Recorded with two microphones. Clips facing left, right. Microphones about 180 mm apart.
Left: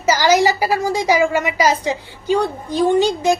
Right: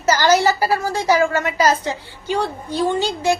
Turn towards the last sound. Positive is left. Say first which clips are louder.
# left 4 dB
turn(degrees=15)  # may be behind; listen again after turning